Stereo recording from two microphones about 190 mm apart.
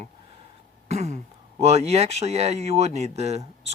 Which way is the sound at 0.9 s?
35° right (ahead or behind).